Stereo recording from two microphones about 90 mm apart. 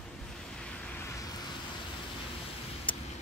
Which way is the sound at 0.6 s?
10° left (ahead or behind).